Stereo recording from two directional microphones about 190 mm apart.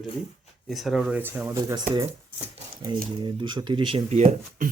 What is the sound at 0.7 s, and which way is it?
Speech, centre (ahead or behind).